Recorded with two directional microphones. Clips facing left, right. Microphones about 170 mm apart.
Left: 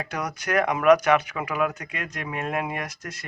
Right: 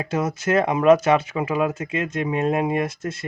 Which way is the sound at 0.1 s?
25° right (ahead or behind).